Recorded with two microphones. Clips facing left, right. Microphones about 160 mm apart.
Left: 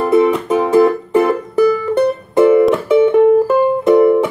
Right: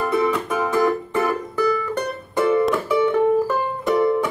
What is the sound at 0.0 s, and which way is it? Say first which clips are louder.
Music: left 8 dB; 25° left (ahead or behind).